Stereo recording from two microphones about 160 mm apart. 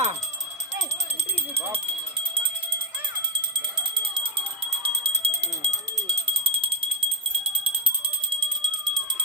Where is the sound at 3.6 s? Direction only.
30° right (ahead or behind).